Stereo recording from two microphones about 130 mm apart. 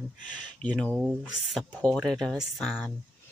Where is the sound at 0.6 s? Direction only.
70° left (ahead or behind).